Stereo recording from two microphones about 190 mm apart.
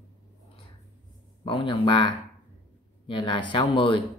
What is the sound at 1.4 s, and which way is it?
Speech, 25° left (ahead or behind).